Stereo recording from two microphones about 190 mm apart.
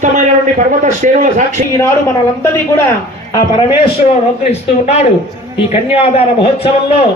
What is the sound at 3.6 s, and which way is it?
Speech, 25° left (ahead or behind).